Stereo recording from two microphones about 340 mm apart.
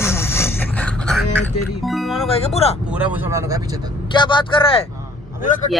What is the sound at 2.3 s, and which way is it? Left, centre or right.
Speech, centre.